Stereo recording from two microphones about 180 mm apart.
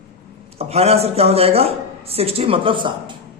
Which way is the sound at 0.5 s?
35° right (ahead or behind).